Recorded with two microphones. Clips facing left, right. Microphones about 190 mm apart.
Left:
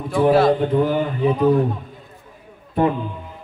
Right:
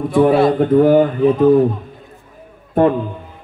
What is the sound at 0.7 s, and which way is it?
Speech, 50° right (ahead or behind).